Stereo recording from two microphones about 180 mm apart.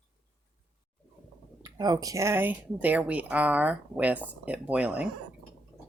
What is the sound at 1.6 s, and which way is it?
Speech, 20° right (ahead or behind).